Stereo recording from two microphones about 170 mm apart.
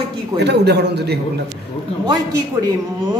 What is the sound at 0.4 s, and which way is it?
Speech, 80° right.